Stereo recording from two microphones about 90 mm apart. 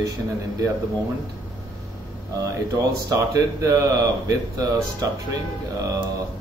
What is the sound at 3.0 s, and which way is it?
Speech, 35° right (ahead or behind).